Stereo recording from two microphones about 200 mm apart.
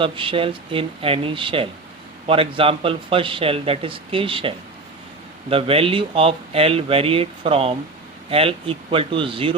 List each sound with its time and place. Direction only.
0.0 s speech: 25° right (ahead or behind)